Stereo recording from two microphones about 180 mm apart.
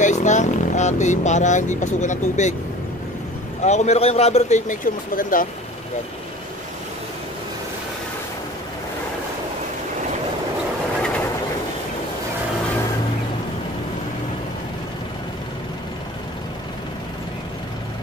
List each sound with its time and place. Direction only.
0.0 s speech: 40° left (ahead or behind)
3.6 s a man's voice: 40° left (ahead or behind)